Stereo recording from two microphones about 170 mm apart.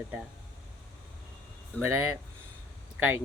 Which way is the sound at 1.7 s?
10° left (ahead or behind).